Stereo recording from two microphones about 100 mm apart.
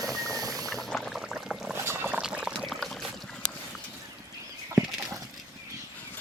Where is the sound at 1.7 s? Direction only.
25° right (ahead or behind).